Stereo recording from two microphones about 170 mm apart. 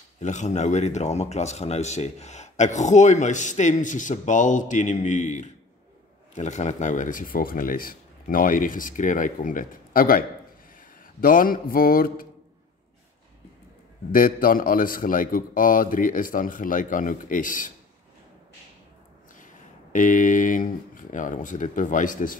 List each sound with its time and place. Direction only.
0.2 s speech: 45° left (ahead or behind)
14.1 s speech: 55° left (ahead or behind)
19.4 s speech: 50° left (ahead or behind)